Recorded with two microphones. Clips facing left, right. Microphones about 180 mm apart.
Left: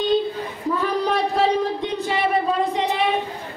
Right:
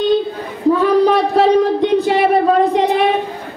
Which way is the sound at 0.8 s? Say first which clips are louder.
Right 7 dB; 70° right (ahead or behind).